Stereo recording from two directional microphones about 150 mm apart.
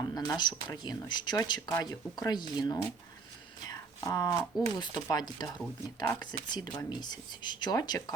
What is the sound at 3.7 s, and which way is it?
Whispering, 25° left (ahead or behind).